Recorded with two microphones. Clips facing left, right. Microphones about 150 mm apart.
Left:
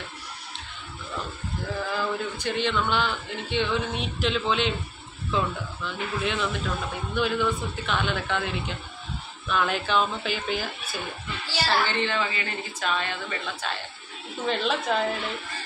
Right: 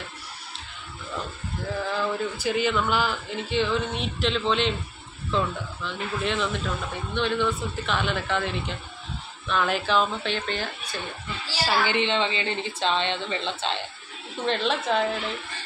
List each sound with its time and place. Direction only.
2.1 s speech: 5° right (ahead or behind)
11.5 s a woman's voice: 15° right (ahead or behind)
14.4 s speech: centre (ahead or behind)